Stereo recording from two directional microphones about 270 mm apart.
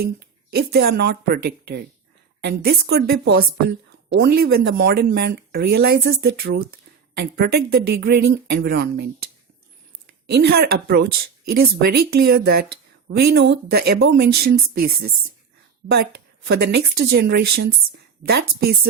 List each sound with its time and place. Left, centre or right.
0.0 s speech: right
10.2 s a woman's voice: right